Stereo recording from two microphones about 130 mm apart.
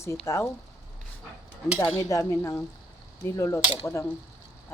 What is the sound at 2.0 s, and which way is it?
Speech, 25° left (ahead or behind).